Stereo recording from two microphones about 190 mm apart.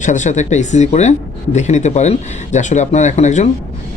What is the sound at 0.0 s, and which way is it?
Speech, 40° left (ahead or behind).